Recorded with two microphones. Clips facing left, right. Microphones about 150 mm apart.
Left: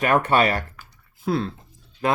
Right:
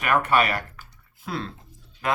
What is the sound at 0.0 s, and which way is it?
Speech, 30° left (ahead or behind).